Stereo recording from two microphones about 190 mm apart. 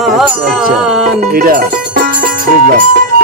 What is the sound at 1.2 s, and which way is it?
Speech, 50° right (ahead or behind).